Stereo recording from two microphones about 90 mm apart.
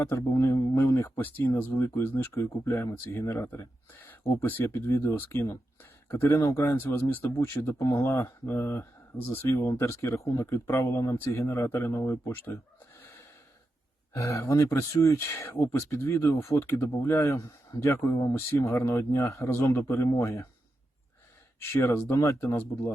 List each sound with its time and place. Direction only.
0.0 s speech: 30° left (ahead or behind)
4.4 s speech: 25° left (ahead or behind)
6.3 s speech: 35° left (ahead or behind)
12.1 s speech: 25° left (ahead or behind)
14.1 s speech: 30° left (ahead or behind)
21.6 s speech: 30° left (ahead or behind)